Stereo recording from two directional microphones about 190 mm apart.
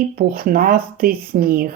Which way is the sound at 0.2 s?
50° right (ahead or behind).